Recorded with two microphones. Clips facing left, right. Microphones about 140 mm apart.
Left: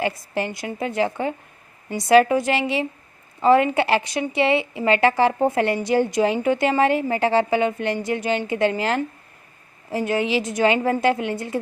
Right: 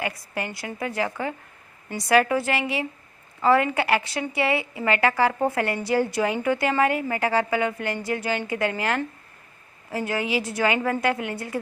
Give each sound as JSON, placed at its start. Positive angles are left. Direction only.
{"t": 0.3, "sound": "a woman's voice", "side_deg": 20}